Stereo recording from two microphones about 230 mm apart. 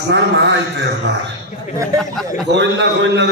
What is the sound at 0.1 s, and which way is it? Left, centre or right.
Speech, right.